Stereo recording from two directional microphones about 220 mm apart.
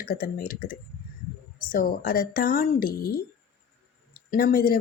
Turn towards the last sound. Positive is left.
turn(degrees=40)  # may be behind; listen again after turning